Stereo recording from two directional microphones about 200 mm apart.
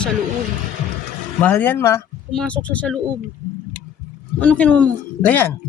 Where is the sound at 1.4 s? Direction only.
10° left (ahead or behind).